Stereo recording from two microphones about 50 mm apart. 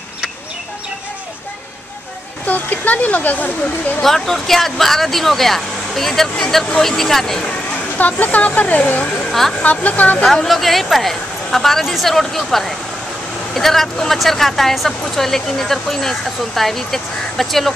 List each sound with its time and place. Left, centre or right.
2.4 s speech: left
4.0 s speech: centre
8.0 s speech: left
9.3 s speech: centre
9.6 s speech: left
10.2 s speech: centre